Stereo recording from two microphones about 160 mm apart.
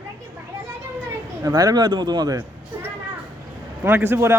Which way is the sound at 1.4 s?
20° right (ahead or behind).